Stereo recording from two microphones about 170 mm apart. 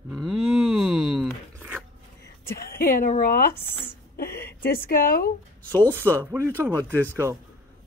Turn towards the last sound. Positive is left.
turn(degrees=-15)  # may be behind; listen again after turning